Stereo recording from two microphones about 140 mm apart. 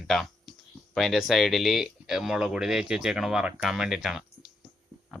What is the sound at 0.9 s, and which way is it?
Speech, centre (ahead or behind).